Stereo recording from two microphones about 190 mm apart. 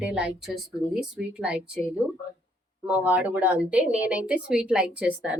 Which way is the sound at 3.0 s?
10° right (ahead or behind).